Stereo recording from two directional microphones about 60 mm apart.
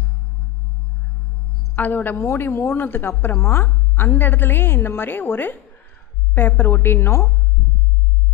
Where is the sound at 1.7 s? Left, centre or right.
Left.